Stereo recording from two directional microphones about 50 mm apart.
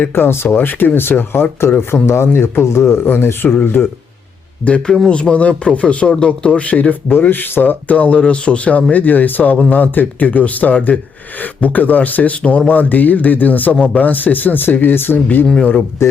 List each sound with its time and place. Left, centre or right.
0.1 s speech: left
0.4 s speech: left
5.0 s speech: centre
7.1 s speech: left
7.9 s speech: left